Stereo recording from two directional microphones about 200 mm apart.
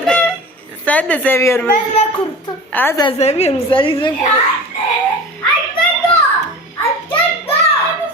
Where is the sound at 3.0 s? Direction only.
30° left (ahead or behind).